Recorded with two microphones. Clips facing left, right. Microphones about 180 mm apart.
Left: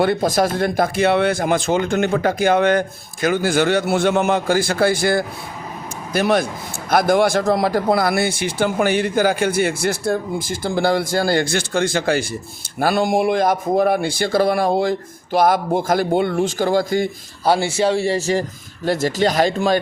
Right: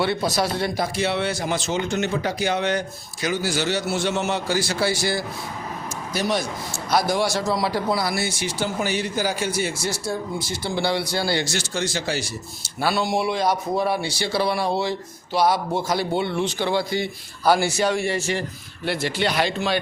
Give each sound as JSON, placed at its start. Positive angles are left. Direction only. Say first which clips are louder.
{"t": 0.0, "sound": "a man's voice", "louder": "left 5 dB", "side_deg": 50}
{"t": 17.4, "sound": "a man's voice", "louder": "left 2 dB", "side_deg": 25}